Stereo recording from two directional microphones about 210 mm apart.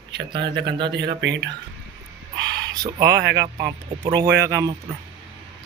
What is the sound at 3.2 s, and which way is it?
Speech, 55° right (ahead or behind).